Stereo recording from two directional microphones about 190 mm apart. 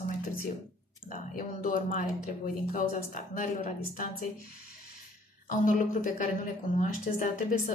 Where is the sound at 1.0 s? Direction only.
45° left (ahead or behind).